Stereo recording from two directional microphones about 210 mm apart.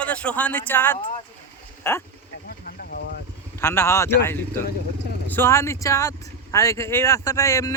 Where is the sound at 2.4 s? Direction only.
45° left (ahead or behind).